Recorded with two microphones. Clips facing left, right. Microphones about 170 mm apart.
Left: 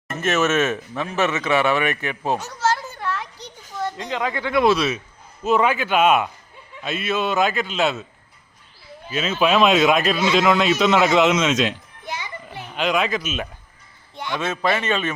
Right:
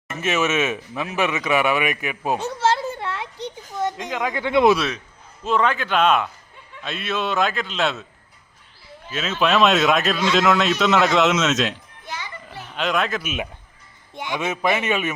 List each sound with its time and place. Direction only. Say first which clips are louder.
0.1 s speech: left 2 dB; 5° right (ahead or behind)
2.4 s a sound: right 2 dB; 25° right (ahead or behind)
4.2 s speech: right 2 dB; 15° right (ahead or behind)
5.4 s speech: left 2 dB; 5° left (ahead or behind)
9.0 s speech: left 2 dB; centre (ahead or behind)
12.0 s children playing: left 2 dB; 15° left (ahead or behind)
12.7 s speech: left 2 dB; centre (ahead or behind)
14.2 s speech: even; 15° right (ahead or behind)